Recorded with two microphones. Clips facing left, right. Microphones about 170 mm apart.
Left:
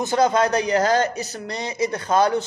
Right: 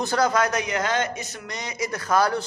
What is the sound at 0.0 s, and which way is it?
Speech, 20° left (ahead or behind).